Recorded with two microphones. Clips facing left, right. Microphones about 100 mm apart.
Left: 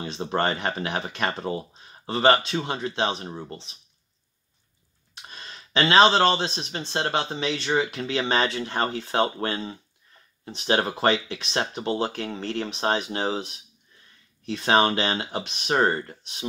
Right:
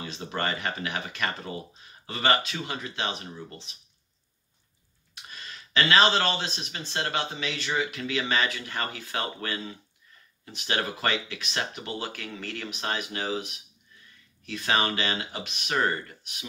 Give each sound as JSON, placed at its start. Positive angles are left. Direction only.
{"t": 0.0, "sound": "speech", "side_deg": 30}
{"t": 5.1, "sound": "speech", "side_deg": 30}